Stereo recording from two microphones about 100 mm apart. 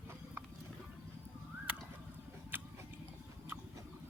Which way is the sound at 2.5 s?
20° right (ahead or behind).